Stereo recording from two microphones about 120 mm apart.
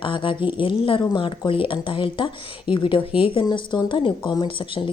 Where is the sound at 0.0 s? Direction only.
45° left (ahead or behind).